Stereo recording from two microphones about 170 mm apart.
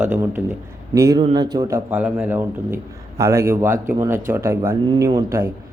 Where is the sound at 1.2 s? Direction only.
30° right (ahead or behind).